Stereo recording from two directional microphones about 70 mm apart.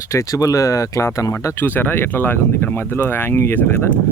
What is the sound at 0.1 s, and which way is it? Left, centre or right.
Speech, left.